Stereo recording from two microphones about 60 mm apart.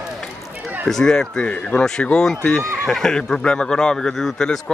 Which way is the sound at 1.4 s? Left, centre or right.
Centre.